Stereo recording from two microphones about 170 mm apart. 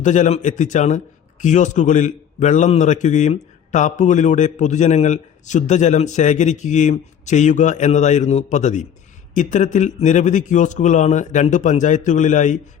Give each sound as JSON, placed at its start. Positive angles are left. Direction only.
{"t": 0.0, "sound": "a man's voice", "side_deg": 45}